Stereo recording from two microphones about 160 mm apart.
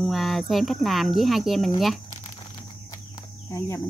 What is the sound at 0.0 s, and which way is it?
Speech, centre (ahead or behind).